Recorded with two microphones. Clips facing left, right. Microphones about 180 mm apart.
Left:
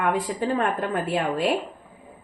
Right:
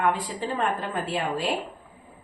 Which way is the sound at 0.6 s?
55° left (ahead or behind).